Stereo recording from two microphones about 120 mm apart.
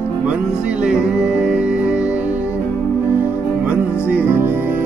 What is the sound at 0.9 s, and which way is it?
Music, 5° right (ahead or behind).